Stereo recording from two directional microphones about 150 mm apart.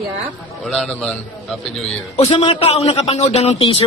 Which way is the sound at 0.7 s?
5° left (ahead or behind).